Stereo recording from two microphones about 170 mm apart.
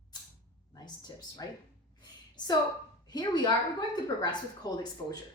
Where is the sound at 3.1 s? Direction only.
25° left (ahead or behind).